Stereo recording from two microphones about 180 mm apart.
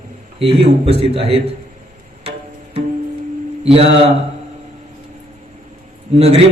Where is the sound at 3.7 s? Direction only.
30° right (ahead or behind).